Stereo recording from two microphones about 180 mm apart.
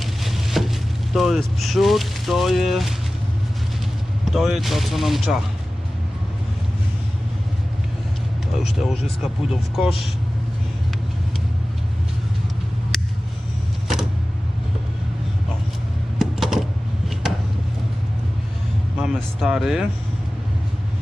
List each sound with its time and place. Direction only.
0.0 s vehicle: centre (ahead or behind)
4.3 s speech: centre (ahead or behind)
8.6 s speech: centre (ahead or behind)
16.1 s a sound: centre (ahead or behind)
18.9 s speech: 5° right (ahead or behind)